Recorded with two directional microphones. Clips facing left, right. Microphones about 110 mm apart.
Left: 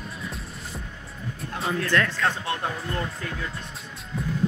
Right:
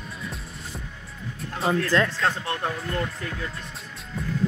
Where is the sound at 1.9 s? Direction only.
25° right (ahead or behind).